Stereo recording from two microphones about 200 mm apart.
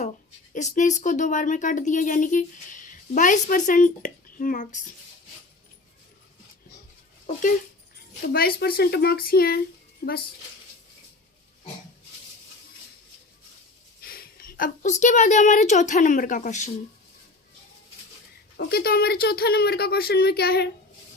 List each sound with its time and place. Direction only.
0.5 s speech: 40° left (ahead or behind)
8.3 s speech: 50° left (ahead or behind)
14.0 s a woman's voice: 50° left (ahead or behind)
18.5 s speech: 50° left (ahead or behind)